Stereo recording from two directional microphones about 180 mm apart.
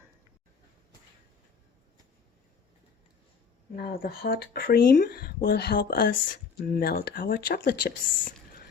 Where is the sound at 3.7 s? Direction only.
60° left (ahead or behind).